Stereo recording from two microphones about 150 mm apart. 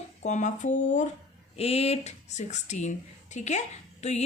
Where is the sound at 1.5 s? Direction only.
40° left (ahead or behind).